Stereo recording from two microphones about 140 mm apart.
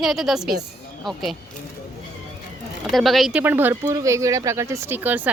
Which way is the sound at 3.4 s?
15° right (ahead or behind).